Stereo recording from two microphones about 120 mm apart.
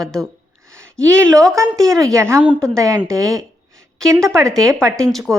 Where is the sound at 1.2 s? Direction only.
5° left (ahead or behind).